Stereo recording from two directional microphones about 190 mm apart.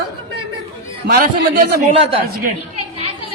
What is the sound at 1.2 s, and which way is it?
Speech, 50° right (ahead or behind).